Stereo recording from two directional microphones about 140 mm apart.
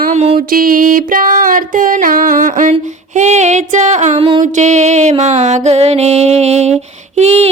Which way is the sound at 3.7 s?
55° right (ahead or behind).